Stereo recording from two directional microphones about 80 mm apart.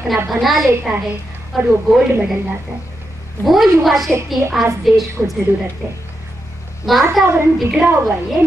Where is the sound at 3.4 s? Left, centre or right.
Centre.